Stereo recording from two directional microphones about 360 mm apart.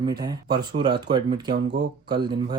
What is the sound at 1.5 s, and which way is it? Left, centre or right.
Speech, right.